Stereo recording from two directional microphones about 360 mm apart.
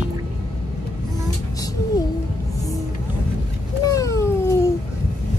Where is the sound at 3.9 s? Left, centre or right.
Centre.